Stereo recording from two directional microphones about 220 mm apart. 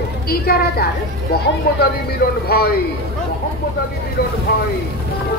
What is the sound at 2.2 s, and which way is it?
Speech, 40° left (ahead or behind).